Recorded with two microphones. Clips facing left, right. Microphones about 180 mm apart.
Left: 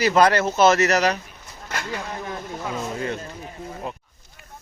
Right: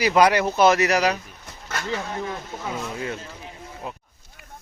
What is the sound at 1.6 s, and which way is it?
Speech, 15° left (ahead or behind).